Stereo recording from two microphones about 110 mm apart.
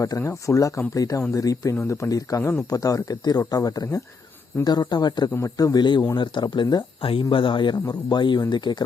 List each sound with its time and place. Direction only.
0.0 s speech: 30° left (ahead or behind)
7.0 s speech: 55° left (ahead or behind)